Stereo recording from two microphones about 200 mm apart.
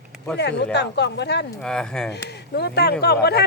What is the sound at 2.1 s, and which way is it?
Speech, 55° left (ahead or behind).